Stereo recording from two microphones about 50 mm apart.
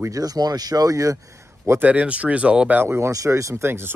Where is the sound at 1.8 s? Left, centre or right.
Right.